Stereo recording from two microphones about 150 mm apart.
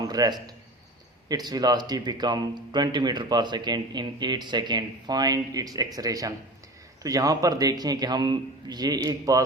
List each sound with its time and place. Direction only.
0.0 s a man's voice: 25° right (ahead or behind)